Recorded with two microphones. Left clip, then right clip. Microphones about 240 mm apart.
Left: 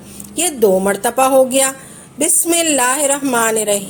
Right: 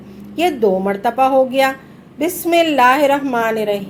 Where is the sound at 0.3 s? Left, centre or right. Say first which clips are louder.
Left 1 dB; left.